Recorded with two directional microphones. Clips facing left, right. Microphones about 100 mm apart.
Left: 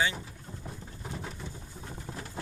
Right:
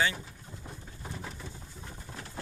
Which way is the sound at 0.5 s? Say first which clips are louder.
Left 5 dB; 50° left (ahead or behind).